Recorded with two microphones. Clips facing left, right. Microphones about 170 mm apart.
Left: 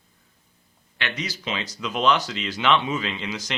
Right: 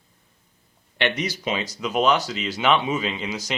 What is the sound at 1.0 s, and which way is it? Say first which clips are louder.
Speech: right 6 dB; 20° right (ahead or behind).